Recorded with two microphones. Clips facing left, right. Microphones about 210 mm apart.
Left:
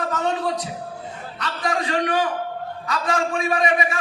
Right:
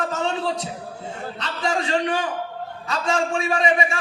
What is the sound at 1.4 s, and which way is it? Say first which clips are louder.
Speech: left 1 dB; 25° right (ahead or behind).